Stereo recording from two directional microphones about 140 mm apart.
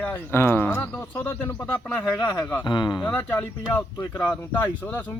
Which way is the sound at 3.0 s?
15° left (ahead or behind).